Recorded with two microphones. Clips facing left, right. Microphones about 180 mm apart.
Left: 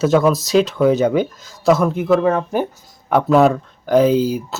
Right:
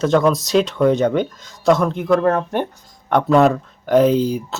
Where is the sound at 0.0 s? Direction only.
5° left (ahead or behind).